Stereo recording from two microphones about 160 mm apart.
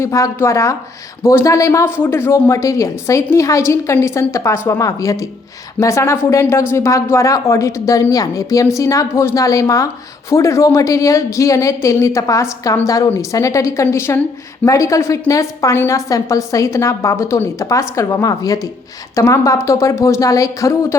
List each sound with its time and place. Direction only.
0.0 s speech: 20° left (ahead or behind)